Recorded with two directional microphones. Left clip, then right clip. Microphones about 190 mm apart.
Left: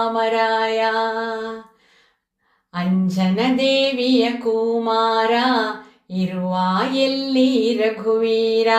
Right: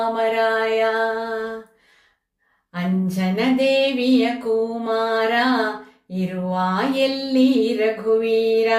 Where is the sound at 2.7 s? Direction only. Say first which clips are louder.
Left 2 dB; 10° right (ahead or behind).